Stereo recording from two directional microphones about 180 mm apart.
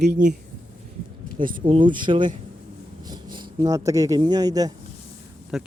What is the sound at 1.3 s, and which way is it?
Speech, 50° right (ahead or behind).